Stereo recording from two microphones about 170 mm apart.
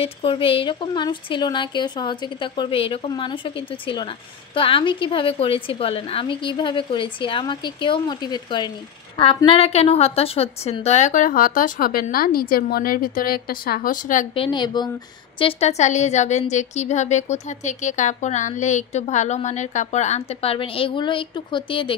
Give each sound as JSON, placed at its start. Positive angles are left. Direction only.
{"t": 0.0, "sound": "a woman's voice", "side_deg": 35}
{"t": 14.3, "sound": "a woman's voice", "side_deg": 30}